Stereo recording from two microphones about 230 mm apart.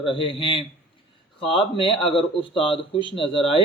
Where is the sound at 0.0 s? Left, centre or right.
Left.